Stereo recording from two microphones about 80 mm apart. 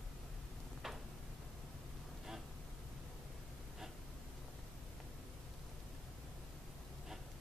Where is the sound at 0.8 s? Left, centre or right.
Centre.